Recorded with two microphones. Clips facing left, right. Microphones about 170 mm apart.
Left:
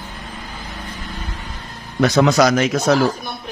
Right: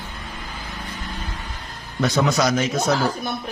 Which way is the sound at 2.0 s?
80° left.